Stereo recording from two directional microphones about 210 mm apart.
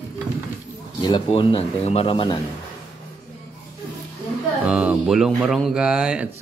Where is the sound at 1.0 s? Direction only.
20° left (ahead or behind).